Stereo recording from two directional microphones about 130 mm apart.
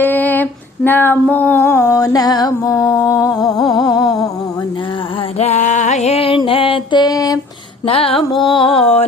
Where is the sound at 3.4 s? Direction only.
30° left (ahead or behind).